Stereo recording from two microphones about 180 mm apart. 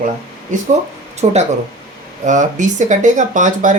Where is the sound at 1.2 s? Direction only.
40° right (ahead or behind).